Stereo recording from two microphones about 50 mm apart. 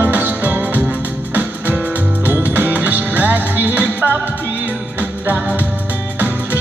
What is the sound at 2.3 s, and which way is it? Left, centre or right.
Music, right.